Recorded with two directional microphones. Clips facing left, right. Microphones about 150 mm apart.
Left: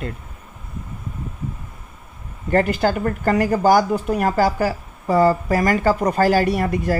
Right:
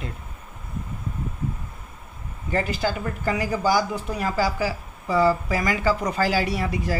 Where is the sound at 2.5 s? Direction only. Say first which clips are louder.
Left 7 dB; 55° left (ahead or behind).